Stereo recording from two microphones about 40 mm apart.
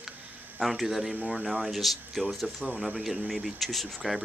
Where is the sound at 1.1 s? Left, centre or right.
Right.